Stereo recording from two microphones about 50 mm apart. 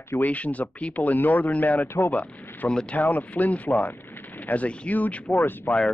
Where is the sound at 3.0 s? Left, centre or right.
Left.